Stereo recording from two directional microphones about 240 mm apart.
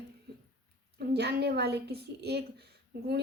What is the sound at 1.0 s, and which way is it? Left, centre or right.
A woman's voice, right.